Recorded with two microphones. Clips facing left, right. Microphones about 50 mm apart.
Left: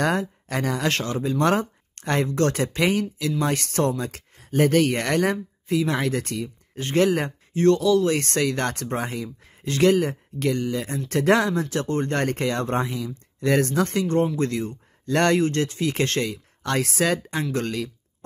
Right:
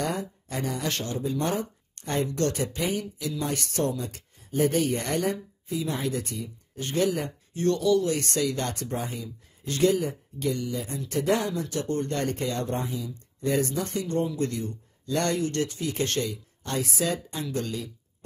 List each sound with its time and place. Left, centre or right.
0.0 s speech: left